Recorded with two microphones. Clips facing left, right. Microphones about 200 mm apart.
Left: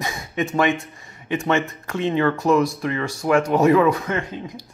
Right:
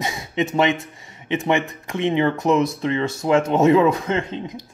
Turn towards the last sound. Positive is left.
turn(degrees=-25)  # may be behind; listen again after turning